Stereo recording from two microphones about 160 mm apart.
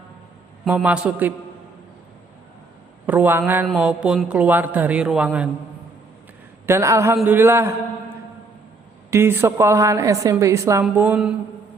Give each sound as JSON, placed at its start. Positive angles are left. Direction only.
{"t": 0.7, "sound": "a woman's voice", "side_deg": -10}
{"t": 3.1, "sound": "a woman's voice", "side_deg": -10}
{"t": 6.7, "sound": "a woman's voice", "side_deg": -15}
{"t": 9.0, "sound": "a woman's voice", "side_deg": -15}